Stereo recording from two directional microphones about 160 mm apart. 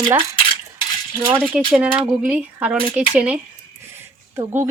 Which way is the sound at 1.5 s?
5° right (ahead or behind).